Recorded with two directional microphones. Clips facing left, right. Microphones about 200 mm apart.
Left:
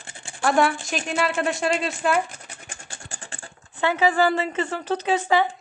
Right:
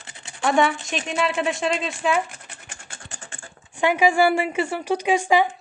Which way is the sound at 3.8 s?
15° right (ahead or behind).